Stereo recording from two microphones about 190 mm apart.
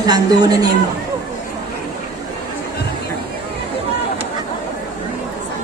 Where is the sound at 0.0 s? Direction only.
20° right (ahead or behind).